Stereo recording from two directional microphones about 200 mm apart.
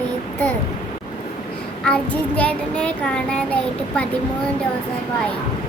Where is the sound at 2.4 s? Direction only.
5° left (ahead or behind).